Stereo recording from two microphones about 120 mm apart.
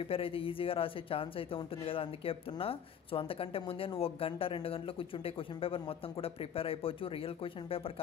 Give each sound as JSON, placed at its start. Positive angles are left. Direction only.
{"t": 0.0, "sound": "speech", "side_deg": 50}